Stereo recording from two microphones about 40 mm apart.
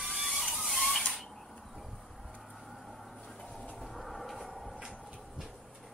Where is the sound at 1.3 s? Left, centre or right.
Centre.